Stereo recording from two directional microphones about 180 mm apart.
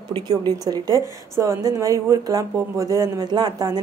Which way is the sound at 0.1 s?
25° right (ahead or behind).